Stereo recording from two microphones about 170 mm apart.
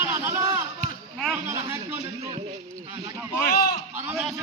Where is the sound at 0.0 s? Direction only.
10° right (ahead or behind).